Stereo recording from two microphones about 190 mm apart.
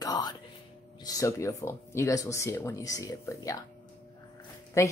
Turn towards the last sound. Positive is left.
turn(degrees=15)  # may be behind; listen again after turning